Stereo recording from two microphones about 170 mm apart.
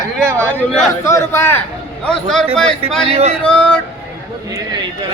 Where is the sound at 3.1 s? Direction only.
40° right (ahead or behind).